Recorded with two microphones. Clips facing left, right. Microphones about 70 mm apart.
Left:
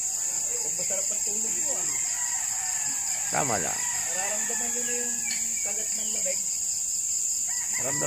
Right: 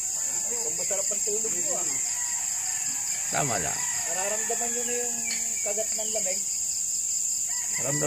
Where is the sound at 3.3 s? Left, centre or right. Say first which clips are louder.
Left 1 dB; centre.